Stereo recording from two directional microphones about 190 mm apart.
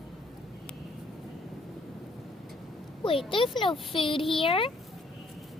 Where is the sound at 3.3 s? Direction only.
25° left (ahead or behind).